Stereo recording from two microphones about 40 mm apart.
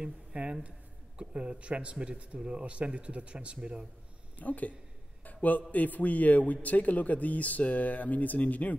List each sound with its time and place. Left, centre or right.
0.0 s speech: right
4.4 s a man's voice: left